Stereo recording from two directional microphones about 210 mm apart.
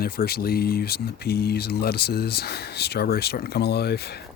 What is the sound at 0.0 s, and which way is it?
Speech, 45° left (ahead or behind).